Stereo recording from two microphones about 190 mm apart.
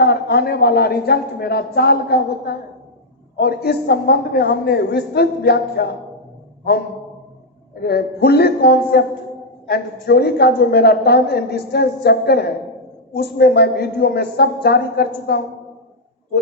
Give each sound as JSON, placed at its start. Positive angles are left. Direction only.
{"t": 0.0, "sound": "a woman's voice", "side_deg": 55}
{"t": 7.8, "sound": "a woman's voice", "side_deg": 55}